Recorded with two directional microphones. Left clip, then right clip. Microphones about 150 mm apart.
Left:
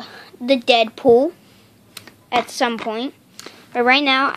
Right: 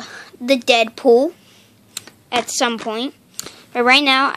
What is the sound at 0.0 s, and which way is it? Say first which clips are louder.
Speech: right 1 dB; 5° right (ahead or behind).